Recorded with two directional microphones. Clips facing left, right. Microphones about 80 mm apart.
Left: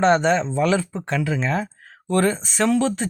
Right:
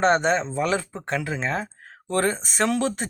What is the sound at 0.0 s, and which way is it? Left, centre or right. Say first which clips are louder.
Speech: left 3 dB; right.